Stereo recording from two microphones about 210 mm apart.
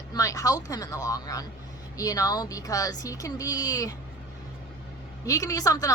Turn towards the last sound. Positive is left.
turn(degrees=15)  # may be behind; listen again after turning